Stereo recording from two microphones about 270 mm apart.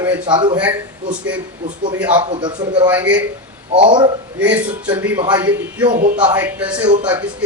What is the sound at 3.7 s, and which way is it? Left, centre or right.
Speech, centre.